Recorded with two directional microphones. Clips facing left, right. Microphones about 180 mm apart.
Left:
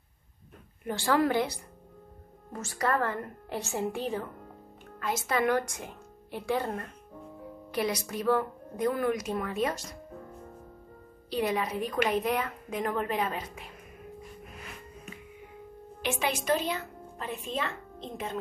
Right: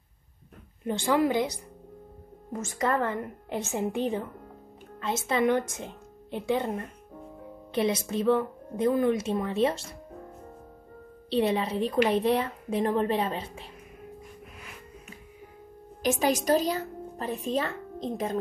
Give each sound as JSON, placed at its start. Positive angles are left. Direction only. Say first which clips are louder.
{"t": 0.8, "sound": "a woman's voice", "louder": "right 2 dB", "side_deg": -20}
{"t": 11.2, "sound": "a woman's voice", "louder": "right 4 dB", "side_deg": -30}
{"t": 16.0, "sound": "speech", "louder": "right 6 dB", "side_deg": -40}